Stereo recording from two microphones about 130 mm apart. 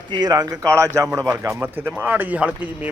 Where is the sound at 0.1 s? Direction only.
30° right (ahead or behind).